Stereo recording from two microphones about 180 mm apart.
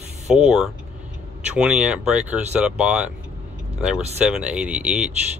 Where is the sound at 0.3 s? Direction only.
5° right (ahead or behind).